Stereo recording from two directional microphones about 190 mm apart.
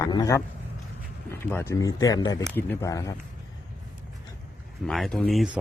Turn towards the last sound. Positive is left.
turn(degrees=0)  # may be behind; listen again after turning